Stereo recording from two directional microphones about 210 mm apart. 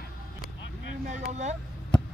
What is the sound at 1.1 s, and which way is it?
Vehicle, 35° right (ahead or behind).